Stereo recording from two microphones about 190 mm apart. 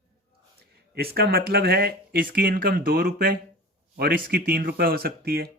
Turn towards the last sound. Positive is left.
turn(degrees=-55)  # may be behind; listen again after turning